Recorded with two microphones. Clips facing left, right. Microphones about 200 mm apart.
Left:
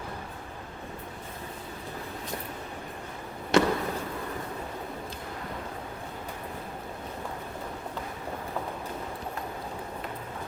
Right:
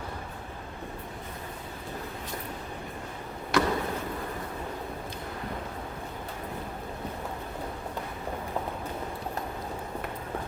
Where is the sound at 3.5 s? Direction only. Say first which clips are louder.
Left 3 dB; 25° left (ahead or behind).